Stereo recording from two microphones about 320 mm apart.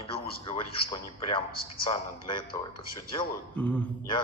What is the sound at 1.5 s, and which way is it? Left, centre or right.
Speech, left.